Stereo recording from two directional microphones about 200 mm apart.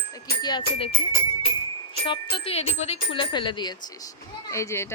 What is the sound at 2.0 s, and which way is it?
A woman's voice, 25° left (ahead or behind).